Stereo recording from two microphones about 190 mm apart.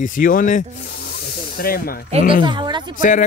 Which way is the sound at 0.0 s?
45° left (ahead or behind).